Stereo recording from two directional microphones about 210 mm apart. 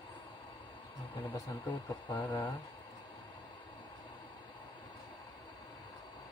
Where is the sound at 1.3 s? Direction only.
20° left (ahead or behind).